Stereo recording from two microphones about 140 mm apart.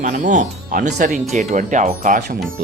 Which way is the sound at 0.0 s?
60° right (ahead or behind).